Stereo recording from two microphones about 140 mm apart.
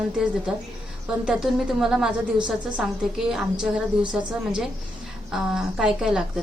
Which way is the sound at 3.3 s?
5° right (ahead or behind).